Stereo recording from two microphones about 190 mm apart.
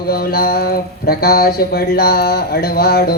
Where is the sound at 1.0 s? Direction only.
55° left (ahead or behind).